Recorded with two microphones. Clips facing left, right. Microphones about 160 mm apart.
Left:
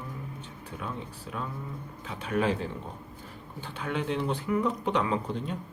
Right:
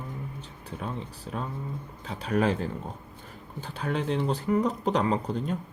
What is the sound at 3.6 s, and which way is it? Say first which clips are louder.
Speech: right 2 dB; 40° right (ahead or behind).